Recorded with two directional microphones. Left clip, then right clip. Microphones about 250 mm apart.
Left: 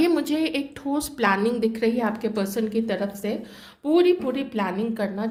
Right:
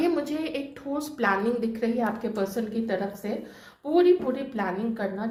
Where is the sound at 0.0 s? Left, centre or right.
Left.